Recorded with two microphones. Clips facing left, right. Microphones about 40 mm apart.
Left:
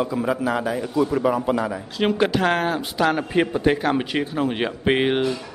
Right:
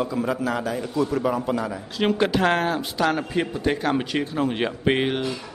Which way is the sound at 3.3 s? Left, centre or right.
Centre.